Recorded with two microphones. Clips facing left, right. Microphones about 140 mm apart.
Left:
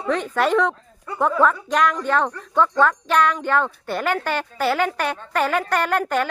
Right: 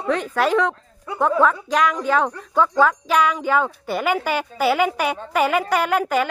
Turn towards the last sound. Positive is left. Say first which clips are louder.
# right 1 dB
turn(degrees=-5)  # may be behind; listen again after turning